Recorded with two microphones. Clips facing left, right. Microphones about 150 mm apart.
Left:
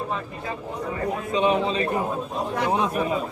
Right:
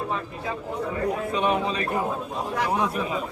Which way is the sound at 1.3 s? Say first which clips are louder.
Left 6 dB; 20° left (ahead or behind).